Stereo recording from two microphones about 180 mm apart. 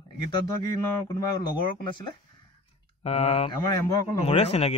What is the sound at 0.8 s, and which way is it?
Speech, 20° left (ahead or behind).